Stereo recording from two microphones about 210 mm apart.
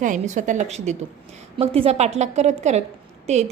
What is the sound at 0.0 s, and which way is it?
A woman's voice, 35° right (ahead or behind).